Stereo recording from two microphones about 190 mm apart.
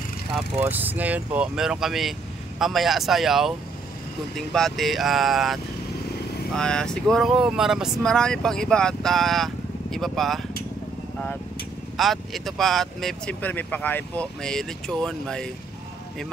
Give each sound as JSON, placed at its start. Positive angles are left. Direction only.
{"t": 0.6, "sound": "speech", "side_deg": -10}
{"t": 12.0, "sound": "speech", "side_deg": 0}